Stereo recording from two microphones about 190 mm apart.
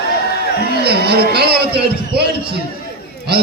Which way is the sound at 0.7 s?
55° right (ahead or behind).